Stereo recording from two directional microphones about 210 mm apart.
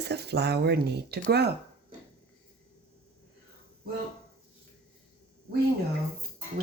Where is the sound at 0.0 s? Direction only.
50° right (ahead or behind).